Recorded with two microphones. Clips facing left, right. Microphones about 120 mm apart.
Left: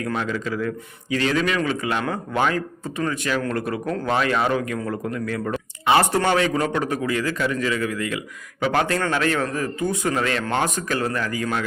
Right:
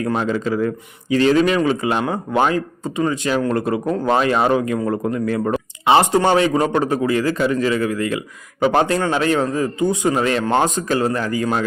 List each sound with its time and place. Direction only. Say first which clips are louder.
0.0 s speech: right 5 dB; 30° right (ahead or behind)